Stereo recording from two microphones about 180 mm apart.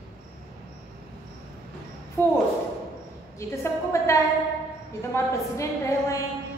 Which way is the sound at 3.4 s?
15° left (ahead or behind).